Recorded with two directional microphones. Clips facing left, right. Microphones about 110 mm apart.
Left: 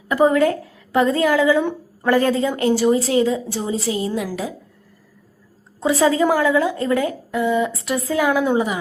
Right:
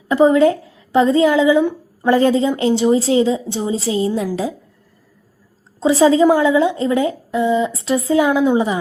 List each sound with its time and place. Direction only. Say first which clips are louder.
0.1 s a woman's voice: right 4 dB; 20° right (ahead or behind)
5.8 s speech: right 5 dB; 25° right (ahead or behind)